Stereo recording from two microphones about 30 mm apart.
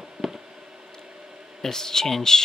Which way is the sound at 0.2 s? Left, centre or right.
Centre.